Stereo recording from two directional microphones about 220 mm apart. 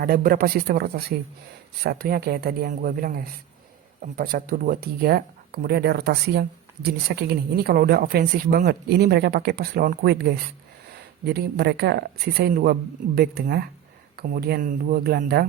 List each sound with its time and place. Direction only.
0.0 s speech: 40° right (ahead or behind)